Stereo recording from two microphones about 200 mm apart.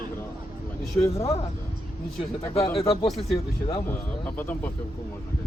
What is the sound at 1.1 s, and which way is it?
Speech, 30° left (ahead or behind).